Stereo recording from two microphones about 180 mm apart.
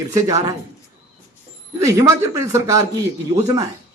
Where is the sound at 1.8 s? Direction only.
15° right (ahead or behind).